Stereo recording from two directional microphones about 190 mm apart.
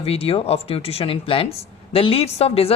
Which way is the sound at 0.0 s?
30° left (ahead or behind).